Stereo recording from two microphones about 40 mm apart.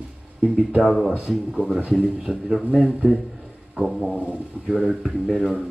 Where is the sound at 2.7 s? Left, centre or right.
Centre.